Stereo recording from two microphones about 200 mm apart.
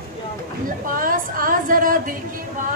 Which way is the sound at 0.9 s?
45° right (ahead or behind).